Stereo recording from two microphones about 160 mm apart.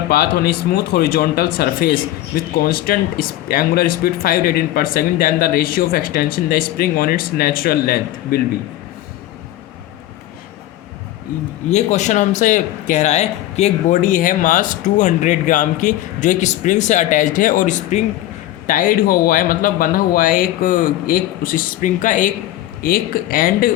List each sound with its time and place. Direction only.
0.1 s speech: 70° left (ahead or behind)
11.7 s speech: 45° left (ahead or behind); by 23.7 s 60° left (ahead or behind)